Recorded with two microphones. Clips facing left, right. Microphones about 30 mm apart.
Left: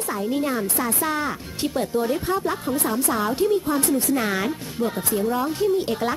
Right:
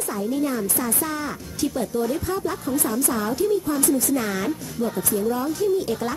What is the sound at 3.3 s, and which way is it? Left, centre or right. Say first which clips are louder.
Speech: even; left.